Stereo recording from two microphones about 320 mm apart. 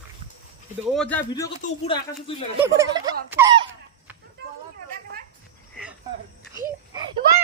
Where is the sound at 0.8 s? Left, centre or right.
Centre.